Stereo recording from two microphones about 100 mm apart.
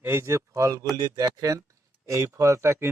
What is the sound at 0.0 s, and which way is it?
Speech, 25° right (ahead or behind).